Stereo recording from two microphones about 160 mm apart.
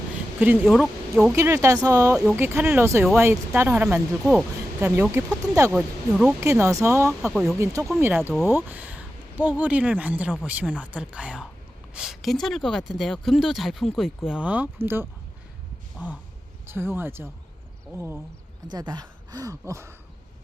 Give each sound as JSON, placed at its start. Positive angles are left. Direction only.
{"t": 0.3, "sound": "speech", "side_deg": -10}
{"t": 1.3, "sound": "speech", "side_deg": -15}
{"t": 5.2, "sound": "speech", "side_deg": -20}
{"t": 7.1, "sound": "speech", "side_deg": -5}
{"t": 7.9, "sound": "speech", "side_deg": -15}
{"t": 16.6, "sound": "speech", "side_deg": -15}
{"t": 18.7, "sound": "speech", "side_deg": -25}